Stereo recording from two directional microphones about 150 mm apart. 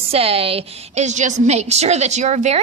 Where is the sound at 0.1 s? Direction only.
40° right (ahead or behind).